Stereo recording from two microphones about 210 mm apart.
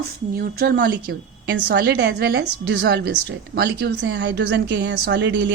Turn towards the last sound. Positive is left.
turn(degrees=-55)  # may be behind; listen again after turning